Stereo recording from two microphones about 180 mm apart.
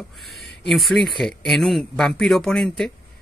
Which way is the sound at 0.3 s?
65° left (ahead or behind).